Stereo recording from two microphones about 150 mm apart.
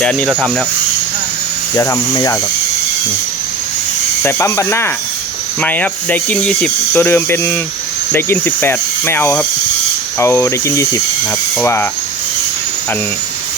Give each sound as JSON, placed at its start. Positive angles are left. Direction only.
{"t": 0.0, "sound": "speech", "side_deg": 5}
{"t": 1.7, "sound": "speech", "side_deg": 20}
{"t": 4.2, "sound": "speech", "side_deg": 15}